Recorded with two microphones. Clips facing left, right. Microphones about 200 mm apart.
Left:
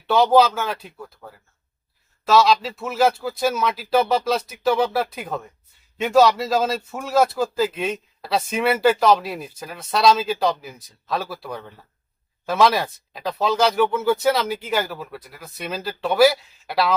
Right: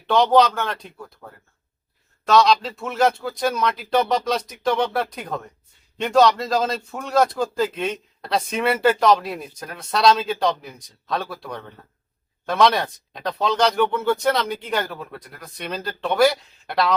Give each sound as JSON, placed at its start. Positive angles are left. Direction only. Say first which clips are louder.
{"t": 0.1, "sound": "speech", "louder": "left 1 dB", "side_deg": 5}